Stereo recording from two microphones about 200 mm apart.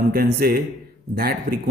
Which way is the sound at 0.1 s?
50° right (ahead or behind).